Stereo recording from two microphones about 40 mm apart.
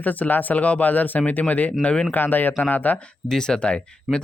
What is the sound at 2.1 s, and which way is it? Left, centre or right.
Speech, left.